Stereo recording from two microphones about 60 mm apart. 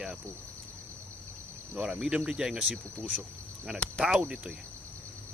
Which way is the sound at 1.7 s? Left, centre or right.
Centre.